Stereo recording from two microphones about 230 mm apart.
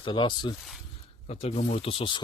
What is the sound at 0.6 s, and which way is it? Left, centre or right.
Speech, centre.